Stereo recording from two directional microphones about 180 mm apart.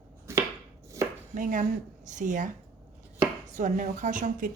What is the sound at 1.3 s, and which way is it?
Speech, 45° right (ahead or behind).